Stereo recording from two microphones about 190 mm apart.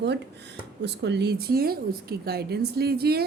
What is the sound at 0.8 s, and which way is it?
A woman's voice, 60° right (ahead or behind).